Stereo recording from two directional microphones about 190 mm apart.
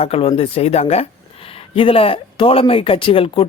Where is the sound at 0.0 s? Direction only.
30° left (ahead or behind).